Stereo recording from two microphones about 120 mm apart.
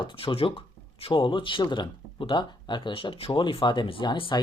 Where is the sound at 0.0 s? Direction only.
45° left (ahead or behind).